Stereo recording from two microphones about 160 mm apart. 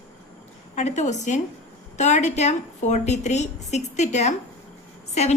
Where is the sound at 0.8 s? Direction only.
45° left (ahead or behind).